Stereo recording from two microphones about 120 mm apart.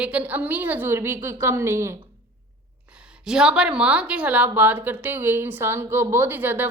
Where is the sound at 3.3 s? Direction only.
5° right (ahead or behind).